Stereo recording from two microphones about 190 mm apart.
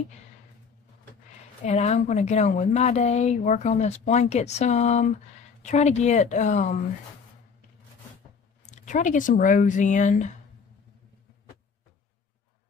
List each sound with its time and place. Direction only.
1.6 s a woman's voice: 35° left (ahead or behind)
8.6 s a woman's voice: 40° left (ahead or behind)